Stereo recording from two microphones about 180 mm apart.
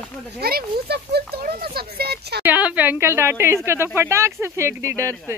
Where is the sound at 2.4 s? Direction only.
10° right (ahead or behind).